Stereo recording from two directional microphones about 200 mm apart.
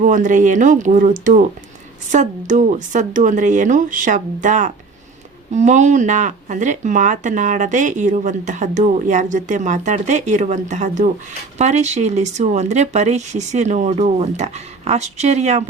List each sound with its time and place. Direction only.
0.0 s speech: 40° right (ahead or behind)